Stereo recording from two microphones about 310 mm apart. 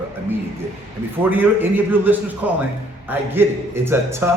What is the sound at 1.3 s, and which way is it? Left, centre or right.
A man's voice, centre.